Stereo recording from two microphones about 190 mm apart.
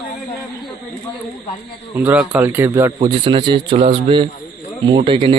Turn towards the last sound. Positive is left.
turn(degrees=-30)  # may be behind; listen again after turning